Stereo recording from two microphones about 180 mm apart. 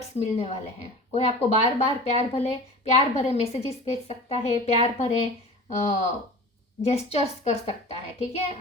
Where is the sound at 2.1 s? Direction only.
40° left (ahead or behind).